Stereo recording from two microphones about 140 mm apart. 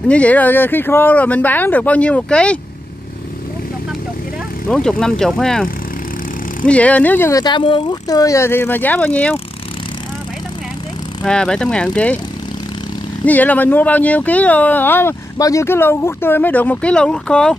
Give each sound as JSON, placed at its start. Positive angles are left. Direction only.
{"t": 0.1, "sound": "speech", "side_deg": 10}
{"t": 4.6, "sound": "speech", "side_deg": 5}
{"t": 11.2, "sound": "speech", "side_deg": 5}
{"t": 13.2, "sound": "speech", "side_deg": 10}